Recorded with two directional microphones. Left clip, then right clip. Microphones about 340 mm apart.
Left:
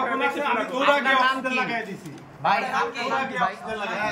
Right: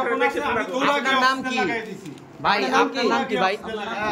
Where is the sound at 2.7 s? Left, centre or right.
Right.